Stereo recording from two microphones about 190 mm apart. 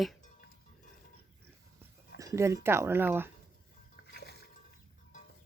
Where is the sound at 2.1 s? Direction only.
15° right (ahead or behind).